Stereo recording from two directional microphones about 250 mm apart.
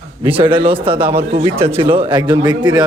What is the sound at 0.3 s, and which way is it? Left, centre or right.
A man's voice, centre.